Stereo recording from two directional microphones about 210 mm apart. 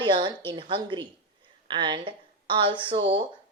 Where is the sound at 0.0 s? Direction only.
20° right (ahead or behind).